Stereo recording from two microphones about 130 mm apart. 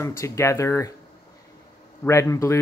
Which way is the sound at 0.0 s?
20° left (ahead or behind).